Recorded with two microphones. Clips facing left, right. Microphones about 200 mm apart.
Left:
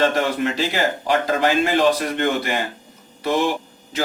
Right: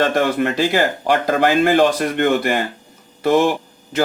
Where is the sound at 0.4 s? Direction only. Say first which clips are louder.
Right 4 dB; 50° right (ahead or behind).